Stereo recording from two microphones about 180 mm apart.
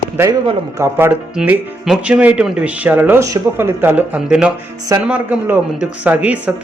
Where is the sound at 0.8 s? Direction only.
10° right (ahead or behind).